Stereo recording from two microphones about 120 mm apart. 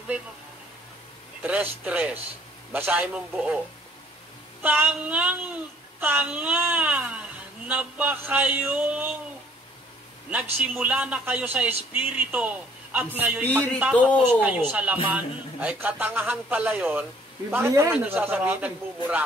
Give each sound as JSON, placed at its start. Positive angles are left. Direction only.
{"t": 1.4, "sound": "speech", "side_deg": -10}
{"t": 4.6, "sound": "speech", "side_deg": -15}
{"t": 10.7, "sound": "a man's voice", "side_deg": -10}